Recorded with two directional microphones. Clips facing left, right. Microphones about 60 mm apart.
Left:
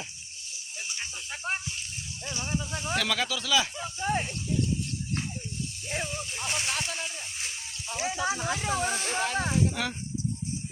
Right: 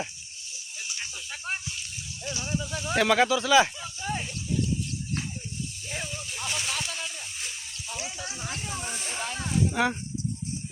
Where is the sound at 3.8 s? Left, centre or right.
Left.